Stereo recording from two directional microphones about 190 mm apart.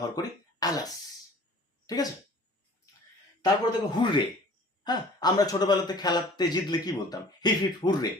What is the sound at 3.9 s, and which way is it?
Speech, 25° left (ahead or behind).